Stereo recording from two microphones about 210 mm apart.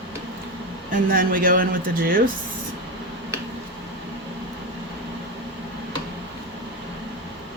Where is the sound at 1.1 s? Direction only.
40° right (ahead or behind).